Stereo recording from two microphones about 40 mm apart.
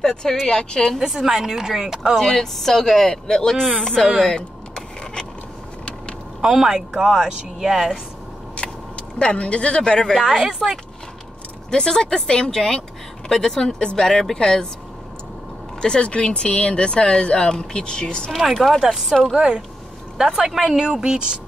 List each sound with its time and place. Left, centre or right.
0.0 s speech: centre
0.9 s a woman's voice: centre
2.1 s speech: centre
4.2 s a sound: centre
6.4 s a woman's voice: centre
8.5 s speech: left
10.1 s a woman's voice: centre
11.7 s speech: centre
15.8 s speech: left
18.5 s speech: centre
18.8 s a woman's voice: centre
20.2 s a woman's voice: centre